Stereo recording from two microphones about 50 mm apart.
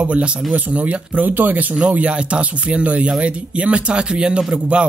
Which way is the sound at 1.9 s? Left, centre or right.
Right.